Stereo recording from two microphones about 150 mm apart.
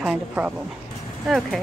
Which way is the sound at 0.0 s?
5° right (ahead or behind).